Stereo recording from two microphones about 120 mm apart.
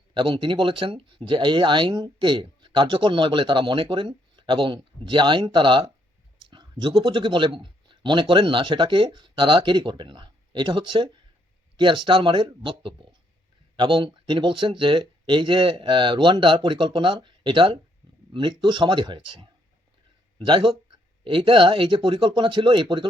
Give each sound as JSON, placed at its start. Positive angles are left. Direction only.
{"t": 0.1, "sound": "speech", "side_deg": -40}